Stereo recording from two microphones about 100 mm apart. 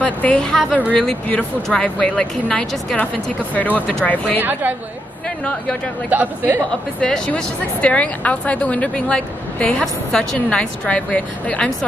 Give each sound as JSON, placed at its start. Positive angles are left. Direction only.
{"t": 0.0, "sound": "a woman's voice", "side_deg": 15}
{"t": 4.4, "sound": "a woman's voice", "side_deg": -20}
{"t": 6.0, "sound": "speech", "side_deg": -15}
{"t": 7.0, "sound": "a woman's voice", "side_deg": 10}